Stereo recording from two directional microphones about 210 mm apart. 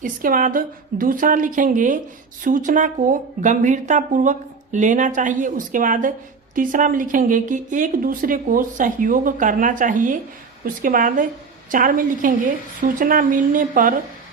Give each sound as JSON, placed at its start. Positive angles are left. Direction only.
{"t": 0.0, "sound": "speech", "side_deg": -40}